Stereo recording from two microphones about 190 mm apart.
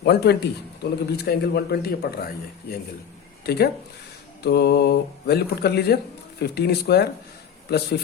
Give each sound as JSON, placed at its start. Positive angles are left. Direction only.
{"t": 0.0, "sound": "speech", "side_deg": 60}